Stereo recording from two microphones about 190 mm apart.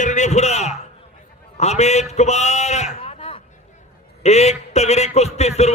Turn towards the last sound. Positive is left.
turn(degrees=35)  # may be behind; listen again after turning